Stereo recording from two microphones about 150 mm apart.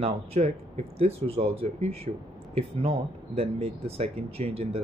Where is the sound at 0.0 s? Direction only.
45° right (ahead or behind).